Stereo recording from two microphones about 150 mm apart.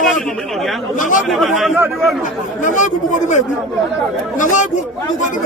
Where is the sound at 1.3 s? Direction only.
Centre (ahead or behind).